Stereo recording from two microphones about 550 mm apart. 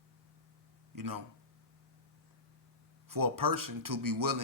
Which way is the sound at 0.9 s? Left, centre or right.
Right.